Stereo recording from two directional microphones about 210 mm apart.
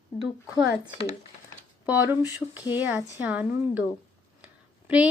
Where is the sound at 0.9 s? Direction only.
30° left (ahead or behind).